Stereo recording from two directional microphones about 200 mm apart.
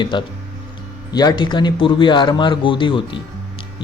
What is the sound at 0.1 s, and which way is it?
Speech, 25° left (ahead or behind).